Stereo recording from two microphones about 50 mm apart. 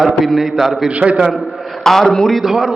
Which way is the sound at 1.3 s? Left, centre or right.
Centre.